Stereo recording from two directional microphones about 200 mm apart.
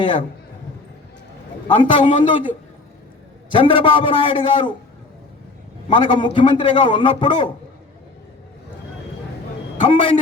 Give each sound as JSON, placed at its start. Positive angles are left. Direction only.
{"t": 0.0, "sound": "a man's voice", "side_deg": 25}
{"t": 1.6, "sound": "a man's voice", "side_deg": 25}
{"t": 5.9, "sound": "a man's voice", "side_deg": 25}
{"t": 9.8, "sound": "a man's voice", "side_deg": 25}